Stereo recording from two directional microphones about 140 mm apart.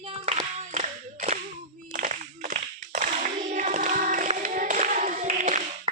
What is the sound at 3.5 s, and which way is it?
Choir, 60° right (ahead or behind).